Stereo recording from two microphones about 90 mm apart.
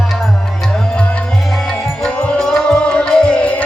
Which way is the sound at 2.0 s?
10° left (ahead or behind).